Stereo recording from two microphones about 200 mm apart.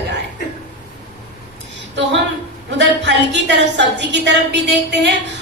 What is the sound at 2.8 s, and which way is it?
A woman's voice, 60° right (ahead or behind).